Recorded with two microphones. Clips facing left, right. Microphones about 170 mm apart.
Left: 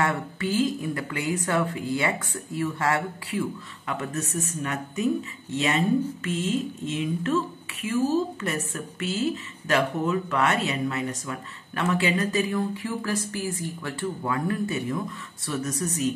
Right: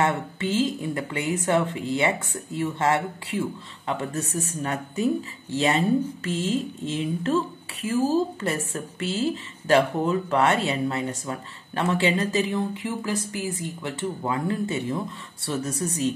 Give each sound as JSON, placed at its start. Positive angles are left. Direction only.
{"t": 0.0, "sound": "speech", "side_deg": -25}